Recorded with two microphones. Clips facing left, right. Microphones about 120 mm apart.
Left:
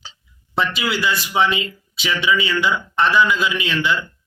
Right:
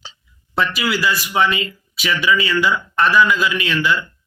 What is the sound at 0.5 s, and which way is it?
A man's voice, 25° left (ahead or behind).